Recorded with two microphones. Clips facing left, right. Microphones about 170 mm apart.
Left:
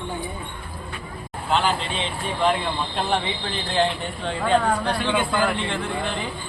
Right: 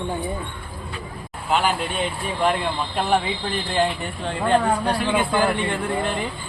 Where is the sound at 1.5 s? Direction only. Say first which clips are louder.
Right 1 dB; 5° right (ahead or behind).